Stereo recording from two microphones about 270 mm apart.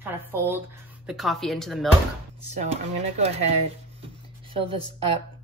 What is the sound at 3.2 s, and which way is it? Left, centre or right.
Speech, right.